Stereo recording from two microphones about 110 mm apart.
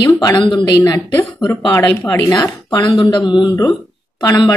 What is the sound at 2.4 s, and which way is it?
Speech, 35° left (ahead or behind).